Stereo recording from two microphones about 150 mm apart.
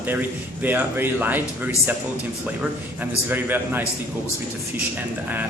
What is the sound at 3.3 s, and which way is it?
Speech, 10° right (ahead or behind).